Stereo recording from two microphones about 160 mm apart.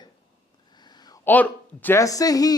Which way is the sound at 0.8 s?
25° left (ahead or behind).